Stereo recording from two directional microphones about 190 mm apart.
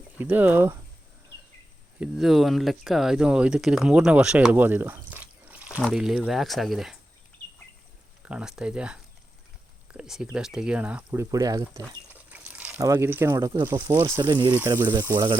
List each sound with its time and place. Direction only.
0.2 s speech: 10° right (ahead or behind)
2.0 s speech: centre (ahead or behind)
8.2 s speech: 5° right (ahead or behind)
12.1 s speech: 10° right (ahead or behind)
14.5 s speech: 10° right (ahead or behind)